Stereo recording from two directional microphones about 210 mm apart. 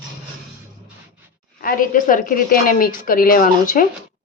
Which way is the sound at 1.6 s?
40° left (ahead or behind).